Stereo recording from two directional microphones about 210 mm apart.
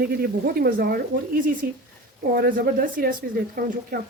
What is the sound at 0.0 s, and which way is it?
A woman's voice, 45° right (ahead or behind).